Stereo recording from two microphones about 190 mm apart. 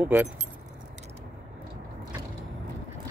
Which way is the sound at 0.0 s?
10° right (ahead or behind).